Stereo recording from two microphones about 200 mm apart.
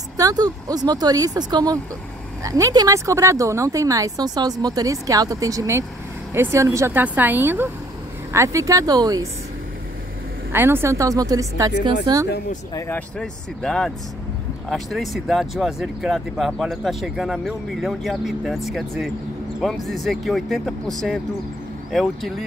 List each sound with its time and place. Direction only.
0.2 s speech: 20° right (ahead or behind)
10.5 s speech: 10° right (ahead or behind)
12.7 s speech: 10° left (ahead or behind)
21.9 s speech: centre (ahead or behind)